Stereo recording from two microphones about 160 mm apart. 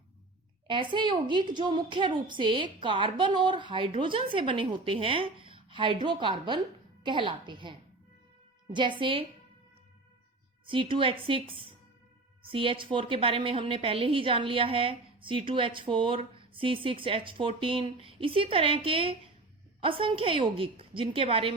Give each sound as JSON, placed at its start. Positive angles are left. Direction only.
{"t": 0.7, "sound": "a woman's voice", "side_deg": -30}
{"t": 10.7, "sound": "a woman's voice", "side_deg": -30}